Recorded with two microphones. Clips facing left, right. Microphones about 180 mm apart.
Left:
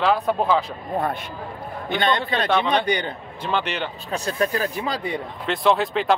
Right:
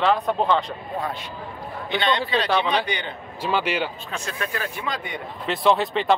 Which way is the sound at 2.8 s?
40° left (ahead or behind).